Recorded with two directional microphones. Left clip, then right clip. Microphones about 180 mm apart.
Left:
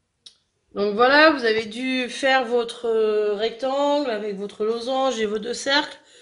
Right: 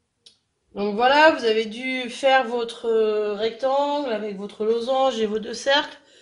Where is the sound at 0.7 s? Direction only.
50° left (ahead or behind).